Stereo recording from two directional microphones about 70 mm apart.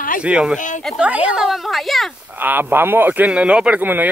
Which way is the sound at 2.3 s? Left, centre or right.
Right.